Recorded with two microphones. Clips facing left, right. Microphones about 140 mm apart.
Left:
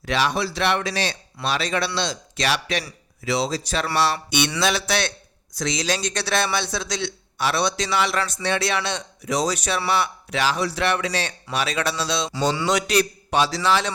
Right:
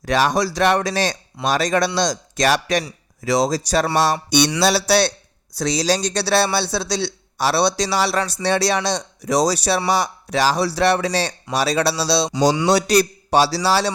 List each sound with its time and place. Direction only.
0.0 s speech: 45° right (ahead or behind)